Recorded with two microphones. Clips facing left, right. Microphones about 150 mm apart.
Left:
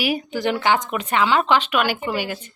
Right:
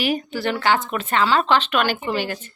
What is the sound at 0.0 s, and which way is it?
Speech, 10° left (ahead or behind).